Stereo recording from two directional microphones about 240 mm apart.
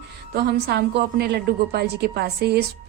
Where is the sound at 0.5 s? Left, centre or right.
Right.